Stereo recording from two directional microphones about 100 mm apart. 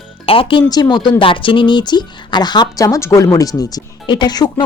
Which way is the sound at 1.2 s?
60° left (ahead or behind).